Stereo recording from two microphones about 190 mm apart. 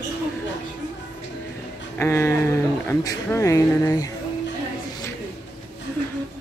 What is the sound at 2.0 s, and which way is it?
Speech, 15° left (ahead or behind).